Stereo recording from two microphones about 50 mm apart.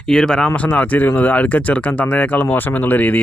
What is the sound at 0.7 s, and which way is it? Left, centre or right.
Speech, left.